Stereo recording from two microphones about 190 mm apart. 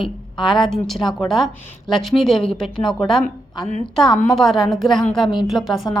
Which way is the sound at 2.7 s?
25° left (ahead or behind).